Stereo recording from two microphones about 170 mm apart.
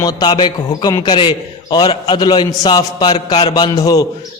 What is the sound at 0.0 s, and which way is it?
A man's voice, 25° left (ahead or behind).